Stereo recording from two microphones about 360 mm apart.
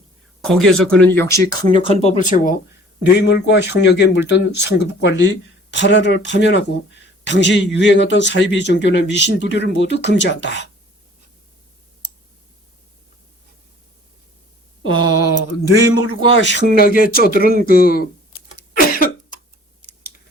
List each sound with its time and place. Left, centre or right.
0.4 s speech: centre; by 10.7 s left
14.8 s speech: left
18.5 s cough: left